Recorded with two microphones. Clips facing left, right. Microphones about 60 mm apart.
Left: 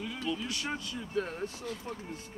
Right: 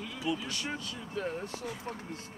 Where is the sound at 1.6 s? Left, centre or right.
Centre.